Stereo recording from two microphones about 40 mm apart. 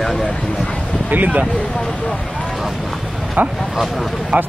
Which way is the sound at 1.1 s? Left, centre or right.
Right.